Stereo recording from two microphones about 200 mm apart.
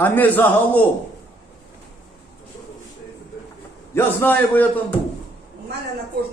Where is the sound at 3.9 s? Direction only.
10° left (ahead or behind).